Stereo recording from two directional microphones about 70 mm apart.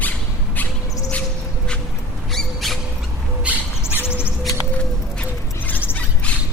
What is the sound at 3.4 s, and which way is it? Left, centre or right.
Owl, centre.